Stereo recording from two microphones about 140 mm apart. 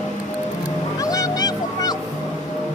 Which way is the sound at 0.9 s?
25° left (ahead or behind).